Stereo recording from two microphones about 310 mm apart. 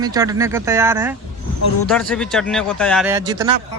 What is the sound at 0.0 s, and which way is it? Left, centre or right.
A man's voice, centre.